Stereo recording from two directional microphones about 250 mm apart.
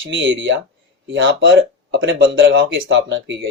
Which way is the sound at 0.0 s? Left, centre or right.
Right.